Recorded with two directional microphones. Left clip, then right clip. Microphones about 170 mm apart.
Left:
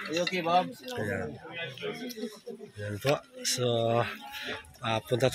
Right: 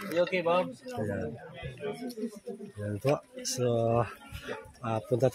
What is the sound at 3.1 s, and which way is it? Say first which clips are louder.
Speech: left 1 dB; 15° right (ahead or behind).